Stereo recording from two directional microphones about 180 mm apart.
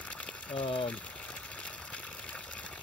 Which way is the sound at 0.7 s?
5° left (ahead or behind).